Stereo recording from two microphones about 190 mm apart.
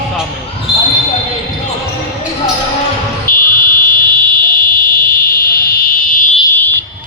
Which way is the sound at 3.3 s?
50° left (ahead or behind).